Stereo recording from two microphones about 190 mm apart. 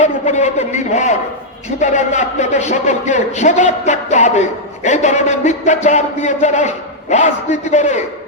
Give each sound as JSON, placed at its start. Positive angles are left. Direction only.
{"t": 0.0, "sound": "a man's voice", "side_deg": 35}